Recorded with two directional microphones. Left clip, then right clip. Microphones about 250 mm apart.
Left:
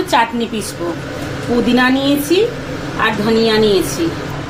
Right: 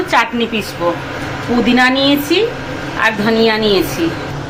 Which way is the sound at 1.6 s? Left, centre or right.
Centre.